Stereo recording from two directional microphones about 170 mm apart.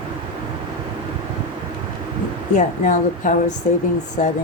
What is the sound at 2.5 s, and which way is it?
A woman's voice, 50° left (ahead or behind).